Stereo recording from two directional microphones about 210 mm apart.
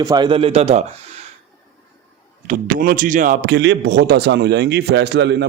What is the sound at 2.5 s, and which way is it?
A man's voice, 40° right (ahead or behind).